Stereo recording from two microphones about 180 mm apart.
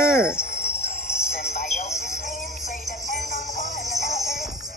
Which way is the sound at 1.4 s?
40° left (ahead or behind).